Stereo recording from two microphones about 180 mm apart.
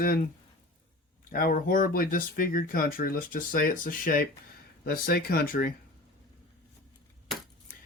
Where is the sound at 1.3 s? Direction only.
55° left (ahead or behind).